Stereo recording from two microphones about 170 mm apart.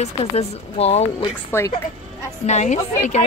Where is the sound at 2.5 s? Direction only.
45° left (ahead or behind).